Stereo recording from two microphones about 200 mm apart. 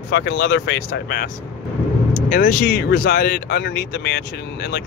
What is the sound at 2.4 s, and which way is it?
Speech, 55° left (ahead or behind).